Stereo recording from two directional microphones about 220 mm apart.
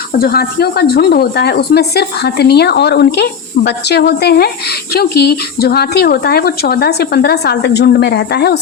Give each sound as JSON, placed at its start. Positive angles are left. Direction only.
{"t": 0.2, "sound": "a woman's voice", "side_deg": 45}